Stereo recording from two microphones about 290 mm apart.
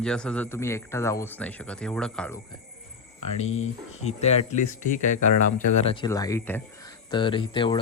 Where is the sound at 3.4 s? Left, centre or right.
Left.